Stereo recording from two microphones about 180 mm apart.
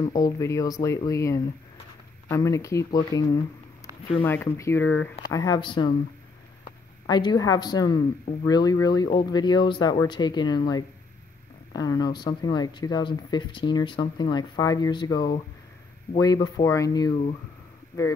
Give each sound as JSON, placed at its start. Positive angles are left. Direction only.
{"t": 0.0, "sound": "speech", "side_deg": 20}
{"t": 7.1, "sound": "speech", "side_deg": 25}